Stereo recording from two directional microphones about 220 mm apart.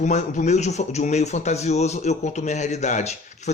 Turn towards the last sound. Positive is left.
turn(degrees=30)  # may be behind; listen again after turning